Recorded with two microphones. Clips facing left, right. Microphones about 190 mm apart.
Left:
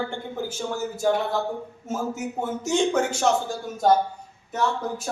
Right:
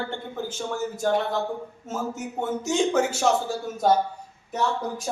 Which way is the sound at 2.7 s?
5° right (ahead or behind).